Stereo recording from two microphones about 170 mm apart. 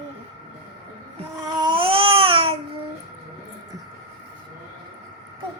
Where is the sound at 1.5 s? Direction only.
25° right (ahead or behind).